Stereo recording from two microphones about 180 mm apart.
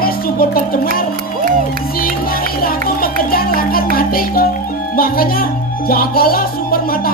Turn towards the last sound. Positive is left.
turn(degrees=55)  # may be behind; listen again after turning